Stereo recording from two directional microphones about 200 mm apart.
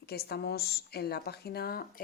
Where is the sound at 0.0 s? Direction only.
50° left (ahead or behind).